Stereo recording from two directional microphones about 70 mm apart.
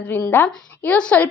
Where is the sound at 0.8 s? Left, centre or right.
Centre.